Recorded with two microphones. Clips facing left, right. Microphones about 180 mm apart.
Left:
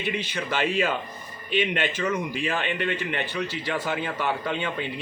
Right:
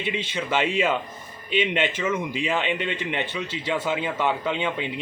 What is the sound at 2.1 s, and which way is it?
Speech, 20° right (ahead or behind).